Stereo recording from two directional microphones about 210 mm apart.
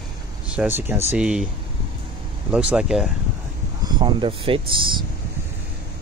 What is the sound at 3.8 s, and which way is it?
Speech, 20° right (ahead or behind).